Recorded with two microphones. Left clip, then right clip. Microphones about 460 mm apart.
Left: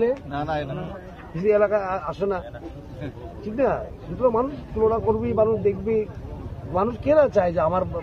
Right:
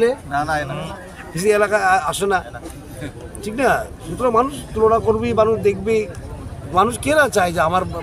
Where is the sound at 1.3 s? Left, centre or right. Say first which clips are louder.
Right 3 dB; left.